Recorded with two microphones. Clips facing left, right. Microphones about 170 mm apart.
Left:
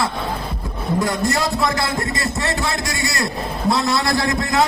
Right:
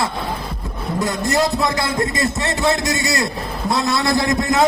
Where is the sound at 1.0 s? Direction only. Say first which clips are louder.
Right 4 dB; 20° right (ahead or behind).